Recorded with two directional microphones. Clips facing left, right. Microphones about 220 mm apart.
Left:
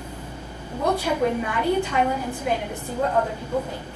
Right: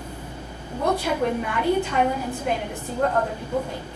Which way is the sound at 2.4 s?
10° right (ahead or behind).